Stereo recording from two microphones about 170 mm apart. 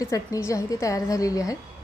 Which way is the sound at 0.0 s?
20° left (ahead or behind).